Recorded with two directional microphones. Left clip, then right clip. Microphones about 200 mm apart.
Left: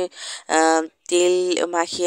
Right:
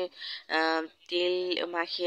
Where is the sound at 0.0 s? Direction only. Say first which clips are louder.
Left 8 dB; 55° left (ahead or behind).